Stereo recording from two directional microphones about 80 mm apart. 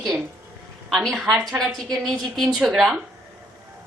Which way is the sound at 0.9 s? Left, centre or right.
Centre.